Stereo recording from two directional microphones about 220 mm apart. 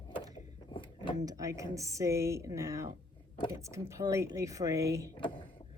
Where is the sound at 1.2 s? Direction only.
15° right (ahead or behind).